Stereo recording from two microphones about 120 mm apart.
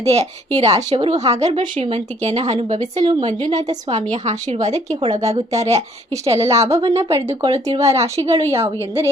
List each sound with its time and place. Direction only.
0.0 s a woman's voice: 65° right (ahead or behind)
3.0 s a woman's voice: 35° right (ahead or behind)
3.2 s a woman's voice: 80° right
5.5 s speech: 65° right (ahead or behind)
6.2 s speech: 25° right (ahead or behind)